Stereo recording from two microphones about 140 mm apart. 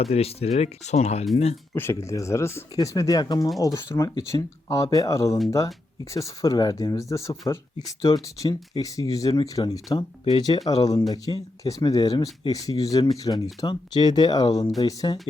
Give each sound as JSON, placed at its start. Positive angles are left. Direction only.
{"t": 0.0, "sound": "speech", "side_deg": 45}
{"t": 1.7, "sound": "speech", "side_deg": 15}